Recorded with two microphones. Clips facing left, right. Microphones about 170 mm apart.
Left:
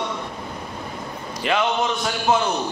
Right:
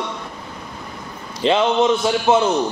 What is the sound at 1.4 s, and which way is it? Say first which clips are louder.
Speech: right 6 dB; 25° right (ahead or behind).